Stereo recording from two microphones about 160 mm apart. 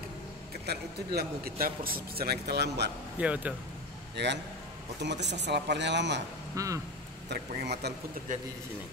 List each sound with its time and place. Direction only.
0.7 s a man's voice: 80° right
3.2 s speech: 10° right (ahead or behind)
4.2 s a man's voice: 90° right
6.5 s speech: 20° right (ahead or behind)
7.2 s a man's voice: 90° right
8.3 s a man's voice: 55° right (ahead or behind)